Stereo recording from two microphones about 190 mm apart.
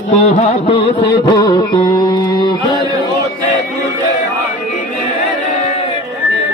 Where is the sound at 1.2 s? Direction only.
20° left (ahead or behind).